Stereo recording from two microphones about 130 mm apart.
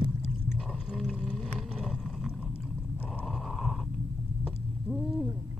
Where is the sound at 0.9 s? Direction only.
5° right (ahead or behind).